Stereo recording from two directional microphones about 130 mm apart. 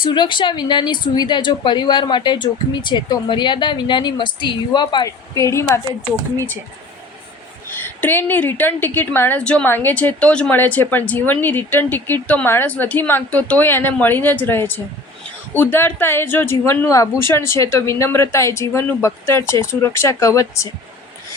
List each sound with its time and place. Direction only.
0.0 s a woman's voice: 35° left (ahead or behind); by 5.8 s 20° left (ahead or behind)
8.0 s a woman's voice: 15° left (ahead or behind)